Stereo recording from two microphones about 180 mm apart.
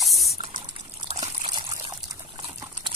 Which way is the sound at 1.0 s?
40° right (ahead or behind).